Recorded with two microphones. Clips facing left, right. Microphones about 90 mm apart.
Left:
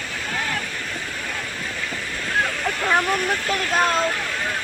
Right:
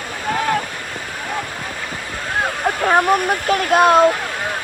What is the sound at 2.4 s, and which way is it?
Speech, 50° right (ahead or behind).